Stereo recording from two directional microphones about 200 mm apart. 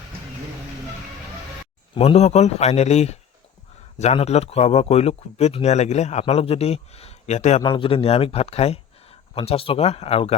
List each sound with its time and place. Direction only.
2.0 s speech: 35° left (ahead or behind)
7.6 s speech: 25° left (ahead or behind)